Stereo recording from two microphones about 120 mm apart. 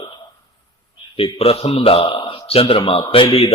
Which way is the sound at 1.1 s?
55° left (ahead or behind).